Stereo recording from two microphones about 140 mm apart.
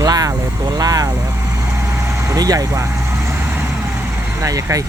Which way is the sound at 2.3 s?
25° right (ahead or behind).